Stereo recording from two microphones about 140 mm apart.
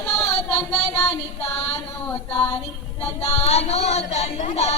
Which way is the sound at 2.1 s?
10° left (ahead or behind).